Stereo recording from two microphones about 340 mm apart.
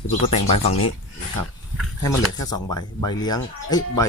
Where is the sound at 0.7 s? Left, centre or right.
Centre.